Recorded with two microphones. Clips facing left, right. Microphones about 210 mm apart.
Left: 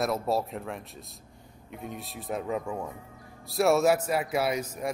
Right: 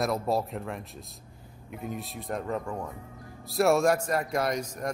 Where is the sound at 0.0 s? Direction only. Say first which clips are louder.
Even; centre (ahead or behind).